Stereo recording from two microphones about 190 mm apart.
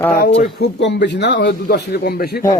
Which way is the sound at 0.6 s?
65° left (ahead or behind).